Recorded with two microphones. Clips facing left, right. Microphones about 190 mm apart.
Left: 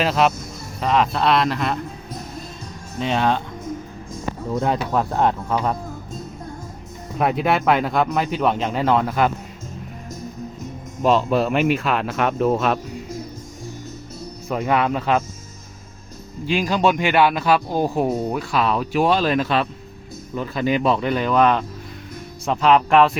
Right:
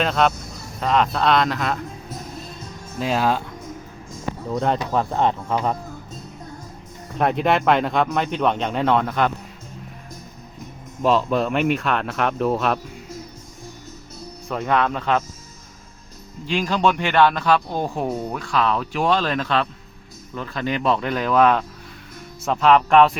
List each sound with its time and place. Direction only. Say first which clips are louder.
0.0 s speech: left 1 dB; 5° left (ahead or behind)
3.0 s speech: left 1 dB; 5° right (ahead or behind)
4.5 s speech: even; 5° left (ahead or behind)
7.2 s speech: even; 5° left (ahead or behind)
11.0 s speech: left 1 dB; centre (ahead or behind)
14.4 s speech: left 1 dB; 10° left (ahead or behind)
16.5 s speech: left 1 dB; 10° left (ahead or behind)